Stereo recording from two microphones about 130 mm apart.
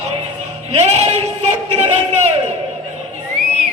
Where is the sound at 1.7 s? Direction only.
60° right (ahead or behind).